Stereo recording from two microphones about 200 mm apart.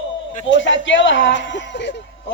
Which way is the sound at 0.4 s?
65° left (ahead or behind).